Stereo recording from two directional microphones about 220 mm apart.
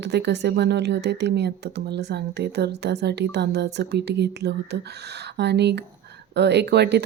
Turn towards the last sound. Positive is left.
turn(degrees=-50)  # may be behind; listen again after turning